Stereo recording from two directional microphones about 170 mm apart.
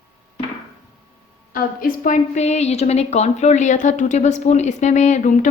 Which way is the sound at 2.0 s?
45° left (ahead or behind).